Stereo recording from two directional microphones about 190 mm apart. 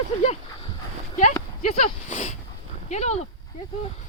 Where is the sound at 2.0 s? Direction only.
40° left (ahead or behind).